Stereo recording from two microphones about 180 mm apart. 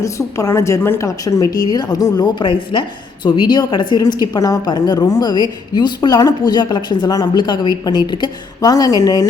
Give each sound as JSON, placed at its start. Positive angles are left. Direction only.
{"t": 0.0, "sound": "a woman's voice", "side_deg": 15}